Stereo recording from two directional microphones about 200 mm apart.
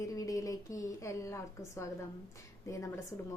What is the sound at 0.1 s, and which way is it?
A woman's voice, 15° left (ahead or behind).